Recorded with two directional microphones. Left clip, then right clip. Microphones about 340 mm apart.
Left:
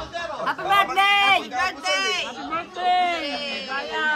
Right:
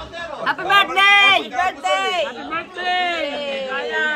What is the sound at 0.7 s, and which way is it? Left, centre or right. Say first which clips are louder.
A man's voice: right 5 dB; centre.